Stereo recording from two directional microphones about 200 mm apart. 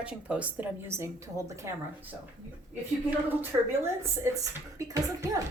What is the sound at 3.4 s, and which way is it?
A woman's voice, 10° right (ahead or behind).